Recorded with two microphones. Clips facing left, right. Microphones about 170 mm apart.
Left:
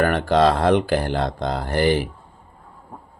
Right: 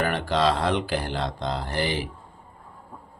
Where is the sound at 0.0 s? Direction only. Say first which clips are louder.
Left 6 dB; 50° left (ahead or behind).